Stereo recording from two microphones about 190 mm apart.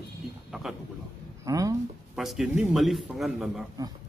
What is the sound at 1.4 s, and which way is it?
Speech, 15° right (ahead or behind).